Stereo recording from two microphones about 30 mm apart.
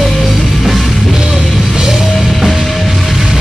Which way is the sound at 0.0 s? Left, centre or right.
Centre.